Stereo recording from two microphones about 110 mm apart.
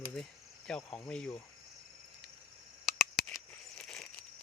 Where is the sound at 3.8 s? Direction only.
5° left (ahead or behind).